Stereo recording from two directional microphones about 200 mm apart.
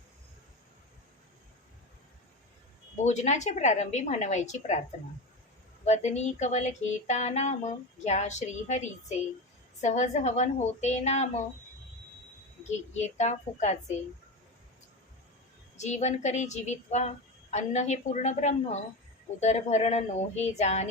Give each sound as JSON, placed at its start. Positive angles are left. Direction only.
{"t": 2.9, "sound": "speech", "side_deg": 35}
{"t": 5.8, "sound": "speech", "side_deg": 35}
{"t": 12.9, "sound": "speech", "side_deg": 35}
{"t": 15.8, "sound": "speech", "side_deg": 35}